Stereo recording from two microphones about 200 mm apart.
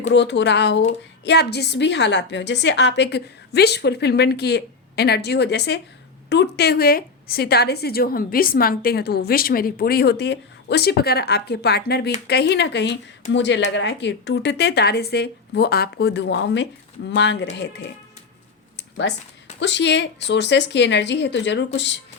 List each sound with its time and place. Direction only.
0.1 s a woman's voice: 60° left (ahead or behind)
19.5 s a woman's voice: 60° left (ahead or behind)